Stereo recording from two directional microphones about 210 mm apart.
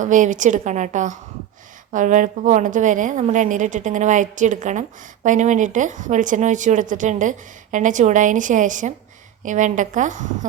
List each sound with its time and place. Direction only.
0.0 s a woman's voice: 35° right (ahead or behind)